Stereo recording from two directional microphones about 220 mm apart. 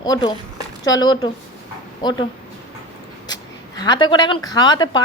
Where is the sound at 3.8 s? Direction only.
20° left (ahead or behind).